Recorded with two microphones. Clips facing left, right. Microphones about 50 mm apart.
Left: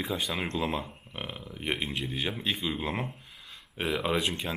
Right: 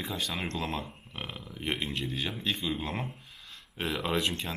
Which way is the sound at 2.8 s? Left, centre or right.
Left.